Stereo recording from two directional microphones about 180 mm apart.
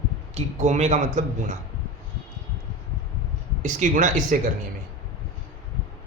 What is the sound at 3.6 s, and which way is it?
Speech, 45° right (ahead or behind).